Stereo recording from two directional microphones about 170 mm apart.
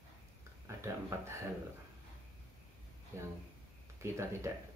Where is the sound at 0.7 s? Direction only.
15° right (ahead or behind).